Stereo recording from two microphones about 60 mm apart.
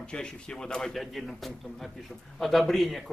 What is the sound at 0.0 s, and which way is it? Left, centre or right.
A man's voice, centre.